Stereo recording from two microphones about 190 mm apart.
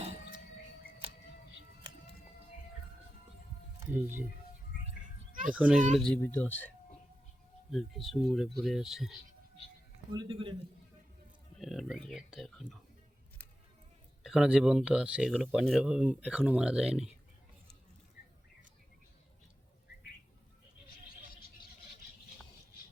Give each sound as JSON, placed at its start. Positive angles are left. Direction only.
{"t": 3.8, "sound": "speech", "side_deg": -10}
{"t": 5.5, "sound": "speech", "side_deg": -5}
{"t": 6.0, "sound": "speech", "side_deg": 5}
{"t": 7.7, "sound": "speech", "side_deg": 0}
{"t": 10.1, "sound": "a man's voice", "side_deg": -25}
{"t": 11.6, "sound": "speech", "side_deg": 0}
{"t": 14.3, "sound": "speech", "side_deg": -5}